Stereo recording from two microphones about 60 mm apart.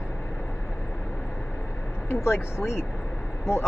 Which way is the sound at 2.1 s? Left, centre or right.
Left.